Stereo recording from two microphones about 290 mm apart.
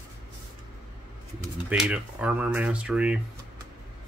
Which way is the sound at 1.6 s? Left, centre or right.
Centre.